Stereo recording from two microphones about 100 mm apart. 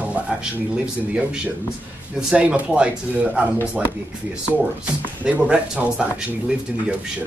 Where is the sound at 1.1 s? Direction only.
10° right (ahead or behind).